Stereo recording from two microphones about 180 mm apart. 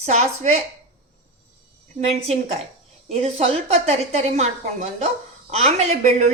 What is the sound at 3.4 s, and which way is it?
A woman's voice, 35° right (ahead or behind).